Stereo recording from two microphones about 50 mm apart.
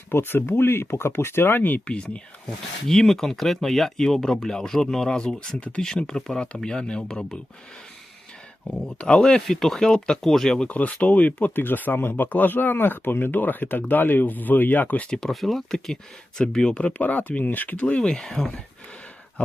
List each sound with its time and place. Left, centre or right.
0.1 s speech: left
2.8 s speech: centre
5.5 s speech: left
6.1 s speech: centre
8.6 s speech: centre
10.7 s speech: left
15.3 s speech: centre
16.8 s speech: left
17.7 s speech: left